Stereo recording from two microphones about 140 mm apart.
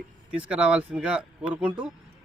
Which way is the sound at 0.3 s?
10° right (ahead or behind).